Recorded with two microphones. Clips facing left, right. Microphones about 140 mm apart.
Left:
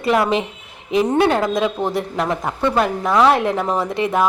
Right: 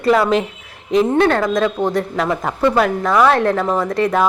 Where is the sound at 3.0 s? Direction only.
20° left (ahead or behind).